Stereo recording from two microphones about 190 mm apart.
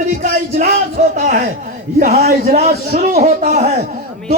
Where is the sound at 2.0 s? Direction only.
45° right (ahead or behind).